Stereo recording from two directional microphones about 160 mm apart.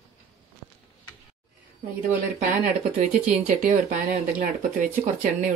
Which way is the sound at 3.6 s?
50° right (ahead or behind).